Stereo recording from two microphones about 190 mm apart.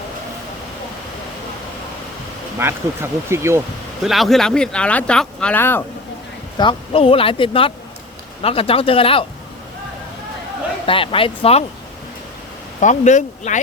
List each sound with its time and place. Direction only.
2.6 s speech: 15° right (ahead or behind)
4.0 s speech: centre (ahead or behind)
6.6 s speech: 25° left (ahead or behind)
10.8 s speech: 30° left (ahead or behind)
12.8 s speech: 40° left (ahead or behind)